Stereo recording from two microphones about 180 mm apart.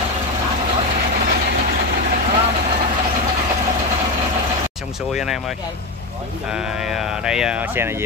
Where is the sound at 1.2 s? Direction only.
55° right (ahead or behind).